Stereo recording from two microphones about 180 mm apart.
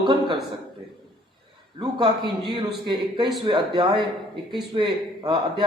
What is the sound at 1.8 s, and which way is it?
A man's voice, 25° right (ahead or behind).